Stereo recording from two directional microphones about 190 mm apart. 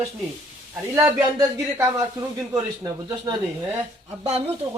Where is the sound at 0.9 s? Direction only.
15° right (ahead or behind).